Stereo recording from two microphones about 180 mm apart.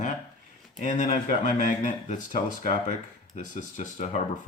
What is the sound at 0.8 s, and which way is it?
Speech, 45° left (ahead or behind).